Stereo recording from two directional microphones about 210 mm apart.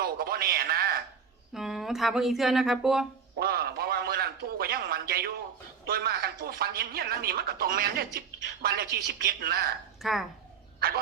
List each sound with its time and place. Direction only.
0.0 s a man's voice: 45° right (ahead or behind)
1.5 s speech: centre (ahead or behind)
3.3 s a sound: 45° right (ahead or behind)
5.8 s speech: 45° right (ahead or behind)
10.0 s speech: centre (ahead or behind)
10.8 s a sound: 45° right (ahead or behind)